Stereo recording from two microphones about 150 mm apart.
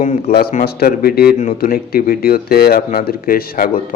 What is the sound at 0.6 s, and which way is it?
Speech, 90° left.